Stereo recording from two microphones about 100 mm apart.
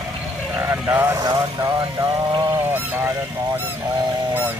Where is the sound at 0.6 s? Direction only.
20° right (ahead or behind).